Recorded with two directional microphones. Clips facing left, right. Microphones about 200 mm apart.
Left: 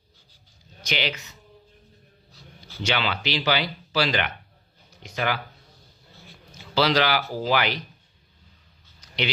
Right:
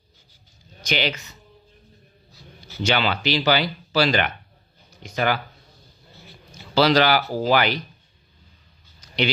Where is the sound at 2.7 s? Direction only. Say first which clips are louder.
Right 4 dB; 40° right (ahead or behind).